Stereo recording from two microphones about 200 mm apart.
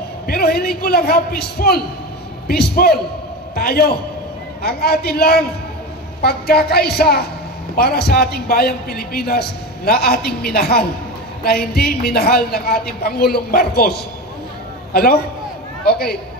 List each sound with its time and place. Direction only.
0.3 s a man's voice: 50° left (ahead or behind)